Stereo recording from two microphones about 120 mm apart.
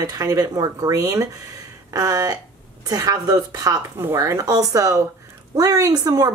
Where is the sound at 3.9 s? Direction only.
20° right (ahead or behind).